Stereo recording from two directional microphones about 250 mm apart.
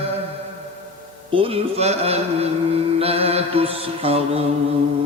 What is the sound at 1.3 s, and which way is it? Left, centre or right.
Music, right.